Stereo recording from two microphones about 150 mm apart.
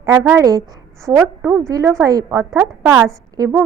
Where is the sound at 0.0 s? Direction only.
20° right (ahead or behind).